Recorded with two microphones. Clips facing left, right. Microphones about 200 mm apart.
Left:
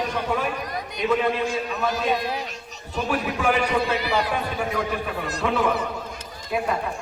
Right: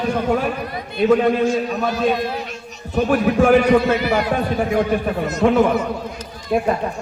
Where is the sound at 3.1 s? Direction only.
50° right (ahead or behind).